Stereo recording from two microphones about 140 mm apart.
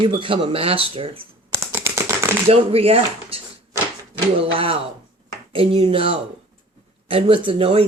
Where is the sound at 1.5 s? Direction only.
20° right (ahead or behind).